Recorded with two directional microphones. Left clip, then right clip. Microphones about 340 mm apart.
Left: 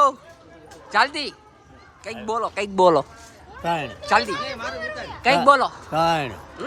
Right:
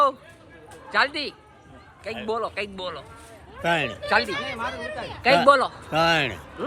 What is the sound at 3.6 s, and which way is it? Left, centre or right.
Speech, centre.